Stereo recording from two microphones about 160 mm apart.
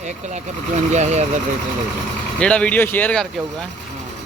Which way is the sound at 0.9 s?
45° right (ahead or behind).